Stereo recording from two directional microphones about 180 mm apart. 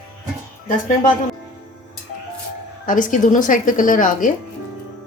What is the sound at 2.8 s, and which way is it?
Speech, 50° left (ahead or behind).